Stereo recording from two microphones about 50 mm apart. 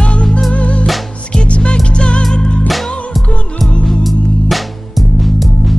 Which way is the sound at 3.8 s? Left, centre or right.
Centre.